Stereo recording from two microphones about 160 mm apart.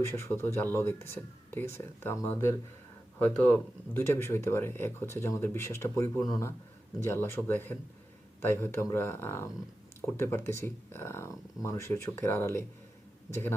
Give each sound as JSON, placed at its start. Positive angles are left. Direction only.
{"t": 0.0, "sound": "speech", "side_deg": 15}